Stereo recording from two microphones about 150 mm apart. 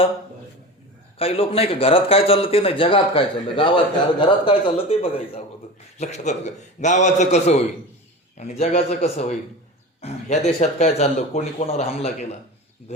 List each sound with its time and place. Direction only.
1.2 s a man's voice: 40° left (ahead or behind)
6.0 s speech: 50° left (ahead or behind)